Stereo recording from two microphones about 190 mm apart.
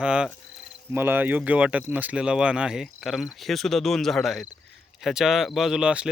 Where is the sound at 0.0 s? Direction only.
5° right (ahead or behind).